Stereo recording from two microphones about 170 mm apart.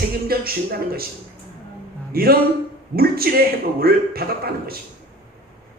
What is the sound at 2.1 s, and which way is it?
Speech, 65° right (ahead or behind).